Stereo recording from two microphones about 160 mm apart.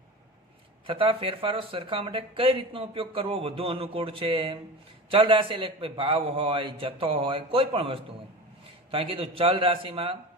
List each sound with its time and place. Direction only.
0.9 s speech: 35° right (ahead or behind)